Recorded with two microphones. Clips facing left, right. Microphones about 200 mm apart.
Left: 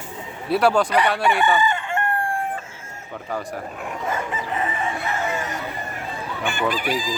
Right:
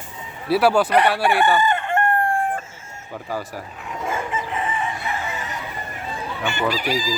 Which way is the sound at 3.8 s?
40° left (ahead or behind).